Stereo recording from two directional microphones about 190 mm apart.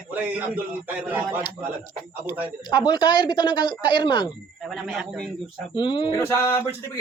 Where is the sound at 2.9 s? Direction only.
25° left (ahead or behind).